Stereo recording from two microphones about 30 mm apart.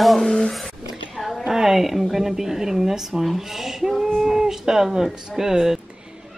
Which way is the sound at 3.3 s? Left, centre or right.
Centre.